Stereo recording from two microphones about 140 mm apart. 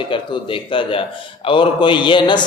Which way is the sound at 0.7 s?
40° left (ahead or behind).